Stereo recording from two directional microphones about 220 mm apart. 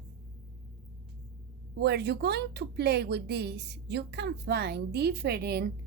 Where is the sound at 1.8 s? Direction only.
50° right (ahead or behind).